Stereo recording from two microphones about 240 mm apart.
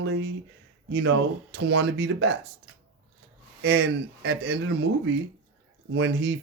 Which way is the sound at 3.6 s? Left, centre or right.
Right.